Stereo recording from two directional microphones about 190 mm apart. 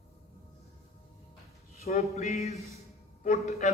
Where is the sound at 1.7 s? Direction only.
35° left (ahead or behind).